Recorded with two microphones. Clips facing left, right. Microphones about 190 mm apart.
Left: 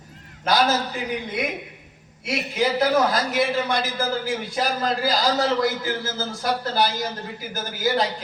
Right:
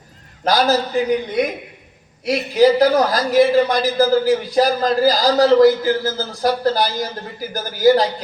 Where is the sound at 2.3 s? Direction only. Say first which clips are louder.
Right 10 dB; 35° right (ahead or behind).